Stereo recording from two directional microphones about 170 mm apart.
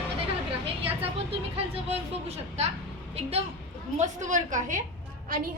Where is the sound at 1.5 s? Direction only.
35° right (ahead or behind).